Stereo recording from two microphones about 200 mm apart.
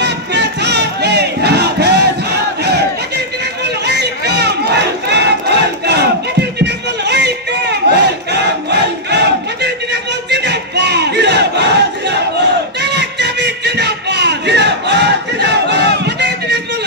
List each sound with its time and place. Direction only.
0.0 s battle cry: 60° right (ahead or behind)
3.6 s crowd: 55° right (ahead or behind)
6.6 s a sound: 60° right (ahead or behind)
7.9 s crowd: 60° right (ahead or behind)
10.3 s battle cry: 60° right (ahead or behind)